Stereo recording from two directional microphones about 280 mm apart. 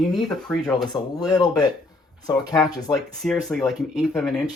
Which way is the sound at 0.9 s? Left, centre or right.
Centre.